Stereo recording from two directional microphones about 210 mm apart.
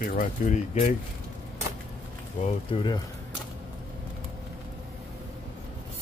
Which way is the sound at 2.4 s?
25° left (ahead or behind).